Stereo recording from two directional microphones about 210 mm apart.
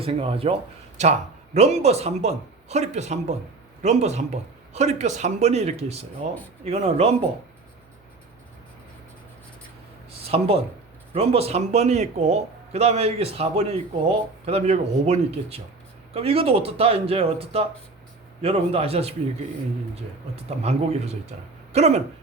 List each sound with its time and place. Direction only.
0.0 s speech: 25° right (ahead or behind)
1.5 s speech: 30° right (ahead or behind)
10.1 s a sound: 30° right (ahead or behind)
11.1 s speech: 30° right (ahead or behind)
20.3 s speech: 30° right (ahead or behind)